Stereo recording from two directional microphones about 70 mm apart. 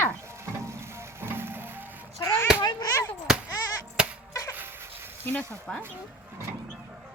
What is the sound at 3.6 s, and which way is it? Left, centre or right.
Bleat, left.